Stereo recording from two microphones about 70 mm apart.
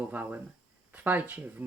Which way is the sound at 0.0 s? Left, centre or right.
Right.